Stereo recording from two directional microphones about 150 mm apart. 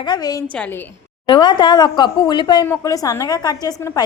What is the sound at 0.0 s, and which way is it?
Speech, 25° left (ahead or behind).